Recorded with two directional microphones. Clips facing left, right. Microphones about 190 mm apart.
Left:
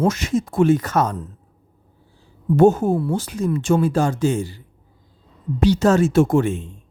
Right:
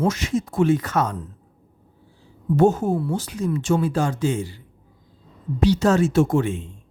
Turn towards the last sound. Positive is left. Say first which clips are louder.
# left 3 dB
turn(degrees=50)  # may be behind; listen again after turning